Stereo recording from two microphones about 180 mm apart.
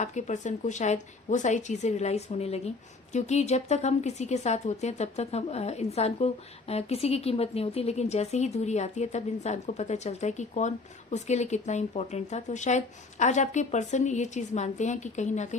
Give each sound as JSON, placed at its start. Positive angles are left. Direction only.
{"t": 0.0, "sound": "a woman's voice", "side_deg": 40}